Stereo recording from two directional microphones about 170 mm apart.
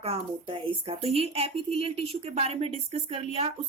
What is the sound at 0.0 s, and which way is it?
A woman's voice, 35° right (ahead or behind).